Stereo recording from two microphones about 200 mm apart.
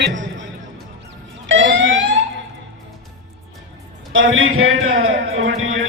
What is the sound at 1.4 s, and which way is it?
Fire alarm, 70° right (ahead or behind).